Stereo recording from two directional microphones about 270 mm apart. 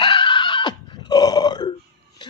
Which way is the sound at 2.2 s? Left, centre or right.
Centre.